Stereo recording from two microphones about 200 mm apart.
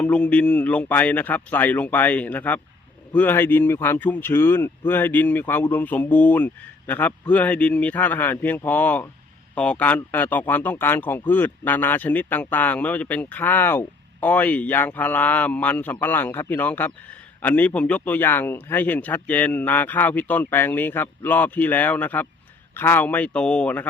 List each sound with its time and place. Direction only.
0.0 s speech: 5° left (ahead or behind)